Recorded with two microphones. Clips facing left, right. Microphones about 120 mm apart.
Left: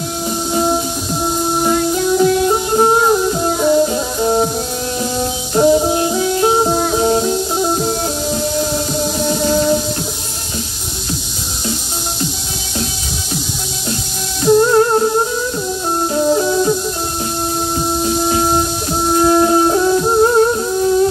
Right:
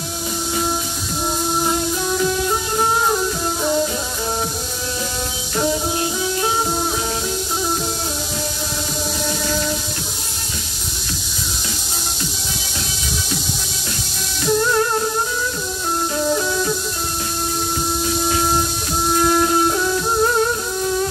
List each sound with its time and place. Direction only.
1.7 s music: 40° left (ahead or behind)
5.5 s music: 35° left (ahead or behind)
9.2 s music: 35° left (ahead or behind)
14.4 s music: 35° left (ahead or behind)
16.2 s music: 30° left (ahead or behind)
18.0 s a sound: 35° left (ahead or behind)
19.1 s music: 30° left (ahead or behind)